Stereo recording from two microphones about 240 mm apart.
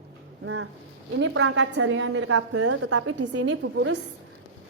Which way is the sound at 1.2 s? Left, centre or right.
Right.